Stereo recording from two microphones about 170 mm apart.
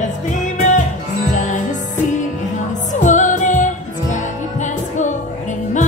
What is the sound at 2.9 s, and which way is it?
Music, 45° left (ahead or behind).